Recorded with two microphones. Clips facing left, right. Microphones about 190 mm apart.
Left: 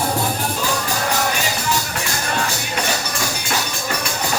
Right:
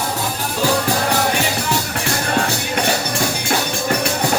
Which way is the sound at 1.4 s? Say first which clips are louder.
Right 2 dB; 60° right (ahead or behind).